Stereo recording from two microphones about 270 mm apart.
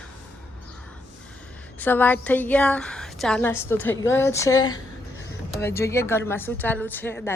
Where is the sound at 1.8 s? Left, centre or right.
Centre.